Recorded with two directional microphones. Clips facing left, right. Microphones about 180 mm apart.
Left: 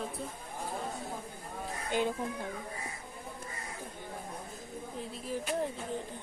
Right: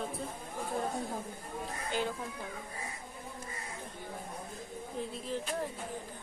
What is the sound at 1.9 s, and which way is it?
Speech, 15° left (ahead or behind).